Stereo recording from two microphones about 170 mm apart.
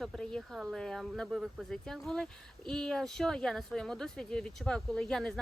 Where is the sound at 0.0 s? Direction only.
5° left (ahead or behind).